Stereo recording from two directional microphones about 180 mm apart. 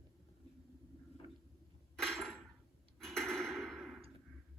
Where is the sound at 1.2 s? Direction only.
30° right (ahead or behind).